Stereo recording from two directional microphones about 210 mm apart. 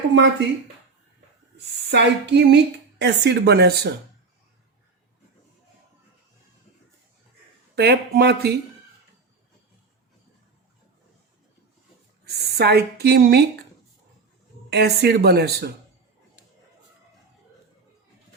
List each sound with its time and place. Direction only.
0.1 s speech: 60° right (ahead or behind)
1.9 s a sound: 55° right (ahead or behind)
3.0 s speech: 55° right (ahead or behind)
7.8 s speech: 50° right (ahead or behind)
12.2 s speech: 50° right (ahead or behind)
14.7 s speech: 50° right (ahead or behind)